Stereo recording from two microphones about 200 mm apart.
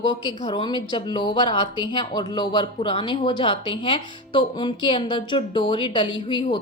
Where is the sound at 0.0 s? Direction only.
20° left (ahead or behind).